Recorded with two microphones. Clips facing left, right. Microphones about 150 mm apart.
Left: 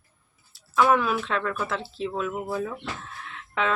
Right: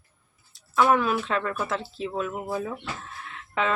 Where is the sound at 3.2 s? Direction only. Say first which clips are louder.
Even; centre (ahead or behind).